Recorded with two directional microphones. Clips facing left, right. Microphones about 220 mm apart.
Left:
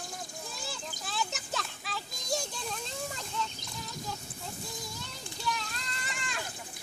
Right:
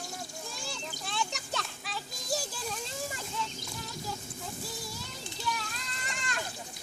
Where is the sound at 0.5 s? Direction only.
Centre (ahead or behind).